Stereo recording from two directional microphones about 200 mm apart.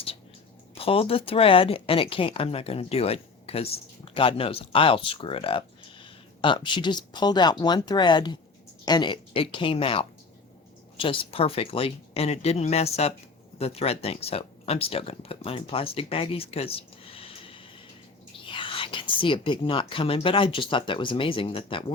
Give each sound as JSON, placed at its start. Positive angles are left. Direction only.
{"t": 0.8, "sound": "speech", "side_deg": 30}